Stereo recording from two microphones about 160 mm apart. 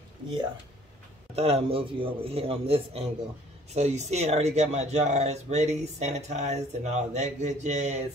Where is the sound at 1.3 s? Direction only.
40° right (ahead or behind).